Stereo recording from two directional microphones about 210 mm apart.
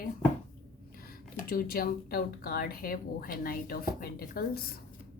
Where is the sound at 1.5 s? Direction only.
45° left (ahead or behind).